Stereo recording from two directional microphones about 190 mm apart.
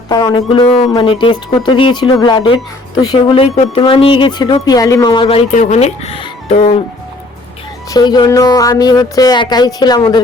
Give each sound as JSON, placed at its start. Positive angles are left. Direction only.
{"t": 0.1, "sound": "a sound", "side_deg": 20}
{"t": 0.6, "sound": "speech", "side_deg": 30}
{"t": 7.9, "sound": "speech", "side_deg": 20}